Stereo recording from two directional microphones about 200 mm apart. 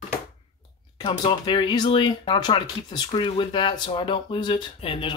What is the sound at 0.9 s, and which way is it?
Speech, 25° left (ahead or behind).